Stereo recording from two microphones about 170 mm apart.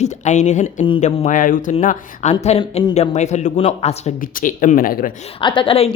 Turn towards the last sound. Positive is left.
turn(degrees=35)  # may be behind; listen again after turning